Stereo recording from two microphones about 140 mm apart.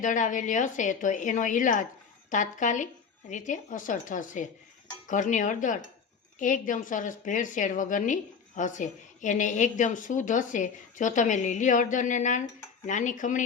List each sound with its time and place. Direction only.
0.0 s a woman's voice: 65° left (ahead or behind)